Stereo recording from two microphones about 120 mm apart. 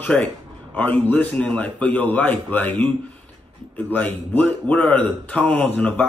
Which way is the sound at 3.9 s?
10° left (ahead or behind).